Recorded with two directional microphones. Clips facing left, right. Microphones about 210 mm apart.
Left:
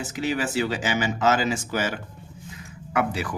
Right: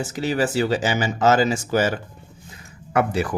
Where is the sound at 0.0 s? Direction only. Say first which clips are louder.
Right 4 dB; 40° right (ahead or behind).